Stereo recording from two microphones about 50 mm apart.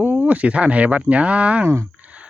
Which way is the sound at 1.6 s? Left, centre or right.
Right.